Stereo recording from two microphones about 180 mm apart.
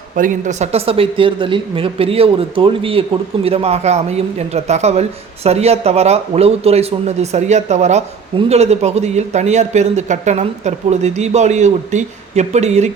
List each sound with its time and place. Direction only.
0.2 s a woman's voice: 45° right (ahead or behind)